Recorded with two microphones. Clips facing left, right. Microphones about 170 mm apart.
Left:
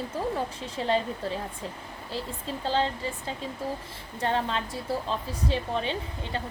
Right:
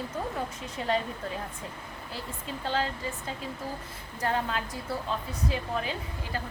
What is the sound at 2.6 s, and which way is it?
A woman's voice, 30° left (ahead or behind).